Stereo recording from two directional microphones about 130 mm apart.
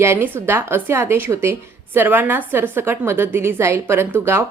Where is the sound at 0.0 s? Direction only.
20° right (ahead or behind).